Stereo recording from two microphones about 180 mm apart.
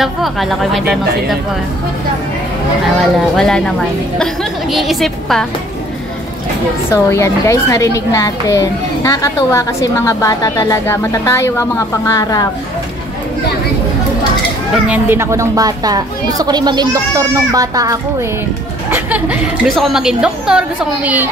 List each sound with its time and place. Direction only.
0.0 s a woman's voice: centre (ahead or behind)
3.0 s a woman's voice: 5° left (ahead or behind)
6.9 s a child's voice: 15° left (ahead or behind)
14.9 s a woman's voice: 10° right (ahead or behind)